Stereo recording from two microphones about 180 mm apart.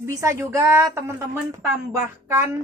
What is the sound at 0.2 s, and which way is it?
Speech, 15° right (ahead or behind).